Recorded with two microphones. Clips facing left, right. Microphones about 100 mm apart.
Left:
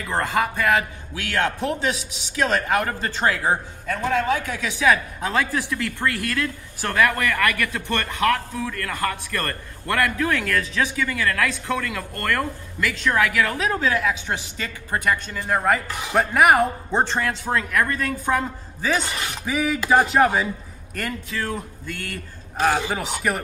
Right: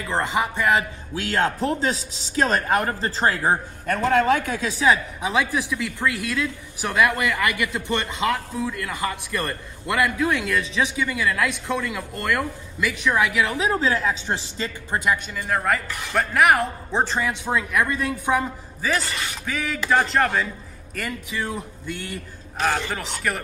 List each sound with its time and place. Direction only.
0.2 s a man's voice: 20° right (ahead or behind)
3.8 s speech: 60° right (ahead or behind); by 5.0 s 30° right (ahead or behind)
5.2 s a man's voice: 10° right (ahead or behind); by 15.0 s 30° right (ahead or behind)
15.3 s a man's voice: centre (ahead or behind)
15.9 s speech: 15° left (ahead or behind)
16.2 s a man's voice: centre (ahead or behind)
21.3 s a man's voice: 10° right (ahead or behind)
22.6 s a man's voice: 10° left (ahead or behind)